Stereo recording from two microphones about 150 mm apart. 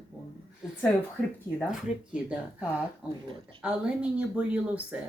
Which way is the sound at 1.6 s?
5° right (ahead or behind).